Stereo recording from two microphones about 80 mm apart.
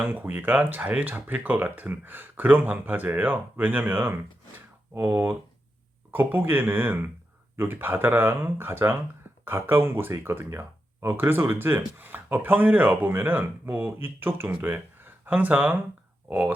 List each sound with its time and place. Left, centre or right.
0.0 s speech: right